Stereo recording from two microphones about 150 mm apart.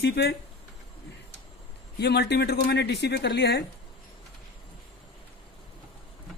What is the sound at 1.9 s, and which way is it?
Speech, 90° left.